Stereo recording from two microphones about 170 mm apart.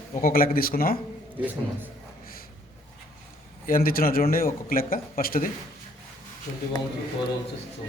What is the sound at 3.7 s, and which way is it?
A man's voice, 60° left (ahead or behind).